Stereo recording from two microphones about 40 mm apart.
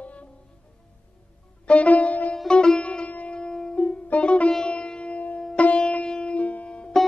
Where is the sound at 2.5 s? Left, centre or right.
Left.